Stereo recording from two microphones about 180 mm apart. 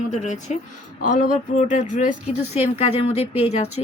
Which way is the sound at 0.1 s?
40° left (ahead or behind).